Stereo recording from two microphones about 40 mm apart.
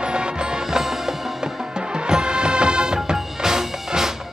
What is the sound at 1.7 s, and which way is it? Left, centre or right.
Music, right.